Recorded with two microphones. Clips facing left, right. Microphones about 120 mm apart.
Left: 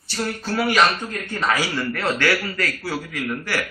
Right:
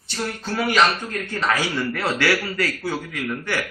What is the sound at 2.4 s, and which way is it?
Speech, 15° right (ahead or behind).